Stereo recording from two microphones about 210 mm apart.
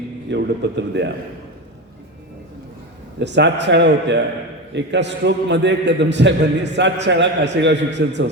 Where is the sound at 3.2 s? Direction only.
55° right (ahead or behind).